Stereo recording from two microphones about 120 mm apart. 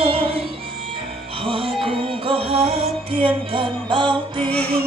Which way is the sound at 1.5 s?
50° right (ahead or behind).